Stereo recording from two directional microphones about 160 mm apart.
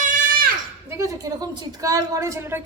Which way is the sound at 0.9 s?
20° right (ahead or behind).